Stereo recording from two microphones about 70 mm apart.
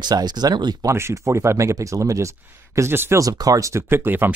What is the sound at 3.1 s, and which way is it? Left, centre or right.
Speech, right.